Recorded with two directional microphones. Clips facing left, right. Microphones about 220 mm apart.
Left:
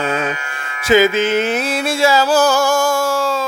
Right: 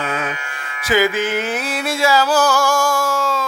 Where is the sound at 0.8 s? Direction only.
25° left (ahead or behind).